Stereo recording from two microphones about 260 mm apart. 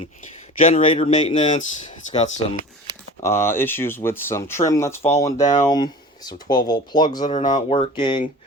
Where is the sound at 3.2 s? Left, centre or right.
Centre.